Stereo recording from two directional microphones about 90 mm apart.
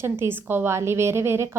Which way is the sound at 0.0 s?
25° right (ahead or behind).